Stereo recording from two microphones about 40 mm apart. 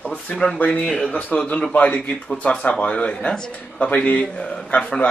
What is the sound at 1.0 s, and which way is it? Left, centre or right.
Speech, left.